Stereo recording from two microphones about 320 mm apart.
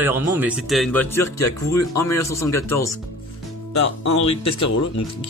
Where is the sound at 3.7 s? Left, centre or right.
Left.